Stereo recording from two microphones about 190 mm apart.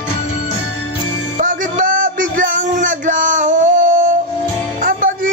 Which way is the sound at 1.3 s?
45° right (ahead or behind).